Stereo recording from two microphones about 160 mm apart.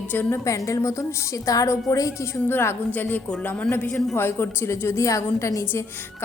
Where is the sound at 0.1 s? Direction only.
15° left (ahead or behind).